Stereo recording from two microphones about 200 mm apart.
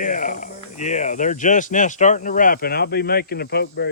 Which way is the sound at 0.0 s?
40° left (ahead or behind).